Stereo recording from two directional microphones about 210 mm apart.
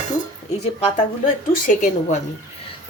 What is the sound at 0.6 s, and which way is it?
A woman's voice, 40° left (ahead or behind).